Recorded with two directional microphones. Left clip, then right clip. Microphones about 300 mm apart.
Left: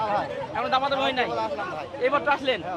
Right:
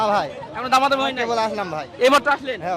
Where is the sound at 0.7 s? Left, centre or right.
Right.